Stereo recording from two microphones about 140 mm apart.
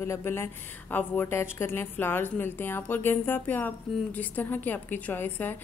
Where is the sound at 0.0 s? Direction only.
20° left (ahead or behind).